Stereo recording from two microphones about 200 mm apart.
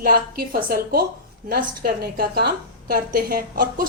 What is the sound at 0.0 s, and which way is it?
A woman's voice, 45° right (ahead or behind).